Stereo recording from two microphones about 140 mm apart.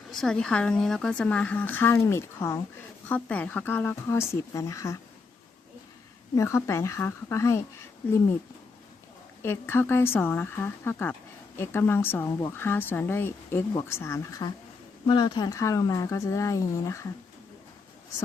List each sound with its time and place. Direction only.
0.1 s a woman's voice: 5° left (ahead or behind); by 4.9 s 20° left (ahead or behind)
6.3 s speech: 20° left (ahead or behind)
9.4 s a woman's voice: 15° left (ahead or behind)
15.0 s speech: 30° left (ahead or behind)